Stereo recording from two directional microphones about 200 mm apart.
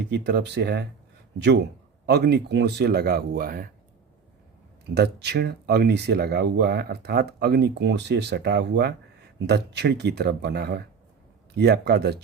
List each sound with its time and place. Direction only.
0.0 s speech: 60° right (ahead or behind)
4.9 s speech: 55° right (ahead or behind)